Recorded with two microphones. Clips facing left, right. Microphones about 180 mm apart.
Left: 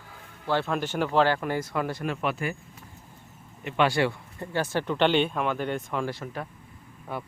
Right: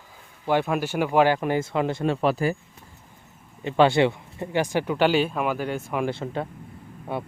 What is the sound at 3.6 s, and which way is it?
Speech, 25° right (ahead or behind).